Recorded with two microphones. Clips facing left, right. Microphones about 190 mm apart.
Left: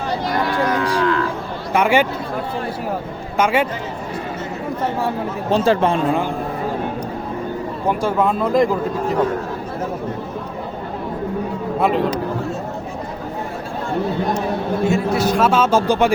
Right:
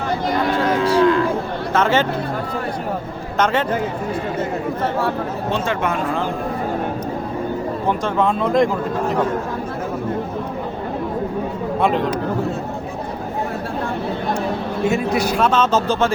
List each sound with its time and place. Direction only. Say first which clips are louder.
0.9 s cattle: right 7 dB; 20° right (ahead or behind)
1.7 s speech: left 2 dB; 10° left (ahead or behind)
3.3 s speech: left 1 dB; 10° left (ahead or behind)
5.5 s speech: left 7 dB; 35° left (ahead or behind)
8.0 s speech: left 2 dB; 5° left (ahead or behind)
11.8 s speech: left 1 dB; centre (ahead or behind)
14.8 s a man's voice: even; 15° right (ahead or behind)
15.4 s speech: left 1 dB; 10° left (ahead or behind)